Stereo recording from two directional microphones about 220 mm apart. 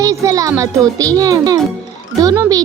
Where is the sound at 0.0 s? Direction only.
15° right (ahead or behind).